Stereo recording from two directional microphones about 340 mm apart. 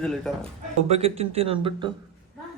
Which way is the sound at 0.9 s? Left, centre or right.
Centre.